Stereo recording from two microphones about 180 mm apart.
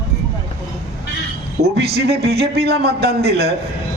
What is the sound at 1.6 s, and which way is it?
A man's voice, 65° right (ahead or behind).